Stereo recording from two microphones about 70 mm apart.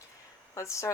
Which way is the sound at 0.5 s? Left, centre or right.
Left.